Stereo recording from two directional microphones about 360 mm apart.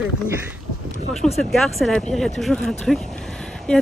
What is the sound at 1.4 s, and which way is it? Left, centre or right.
Speech, centre.